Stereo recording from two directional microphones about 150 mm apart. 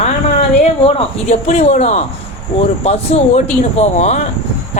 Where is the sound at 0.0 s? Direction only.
45° left (ahead or behind).